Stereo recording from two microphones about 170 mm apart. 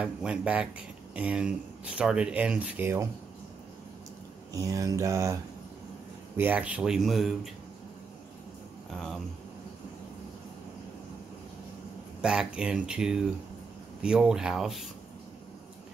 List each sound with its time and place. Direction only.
0.0 s speech: 5° right (ahead or behind)
4.5 s mantra: 20° right (ahead or behind)
6.3 s speech: 10° right (ahead or behind)
8.9 s speech: 5° left (ahead or behind)
12.2 s speech: 5° right (ahead or behind)